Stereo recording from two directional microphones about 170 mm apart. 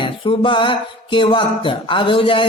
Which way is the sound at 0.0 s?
30° left (ahead or behind).